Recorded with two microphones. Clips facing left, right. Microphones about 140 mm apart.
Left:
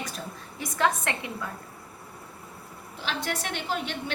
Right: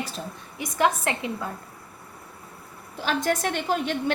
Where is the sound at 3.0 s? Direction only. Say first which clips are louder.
Right 7 dB; 45° right (ahead or behind).